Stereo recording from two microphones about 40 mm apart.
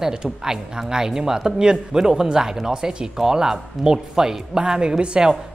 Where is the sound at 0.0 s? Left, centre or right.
Centre.